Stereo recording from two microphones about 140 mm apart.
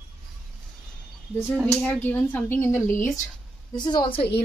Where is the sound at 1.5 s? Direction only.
5° left (ahead or behind).